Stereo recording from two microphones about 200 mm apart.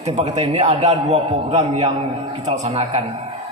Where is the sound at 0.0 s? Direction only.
35° right (ahead or behind).